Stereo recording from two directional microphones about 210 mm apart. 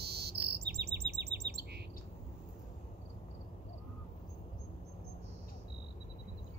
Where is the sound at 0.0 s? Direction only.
50° right (ahead or behind).